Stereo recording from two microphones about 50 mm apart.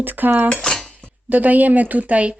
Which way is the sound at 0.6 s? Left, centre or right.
Centre.